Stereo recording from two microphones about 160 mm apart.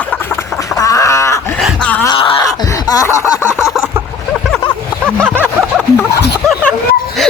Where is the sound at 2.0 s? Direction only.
30° left (ahead or behind).